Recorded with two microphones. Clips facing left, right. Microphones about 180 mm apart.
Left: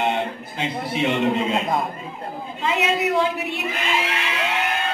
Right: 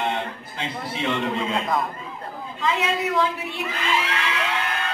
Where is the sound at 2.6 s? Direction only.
25° left (ahead or behind).